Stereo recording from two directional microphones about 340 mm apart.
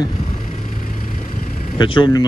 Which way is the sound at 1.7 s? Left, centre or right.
Centre.